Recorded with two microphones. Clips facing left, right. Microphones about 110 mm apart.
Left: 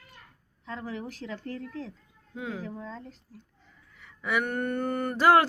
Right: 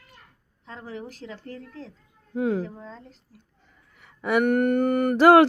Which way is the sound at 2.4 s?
50° right (ahead or behind).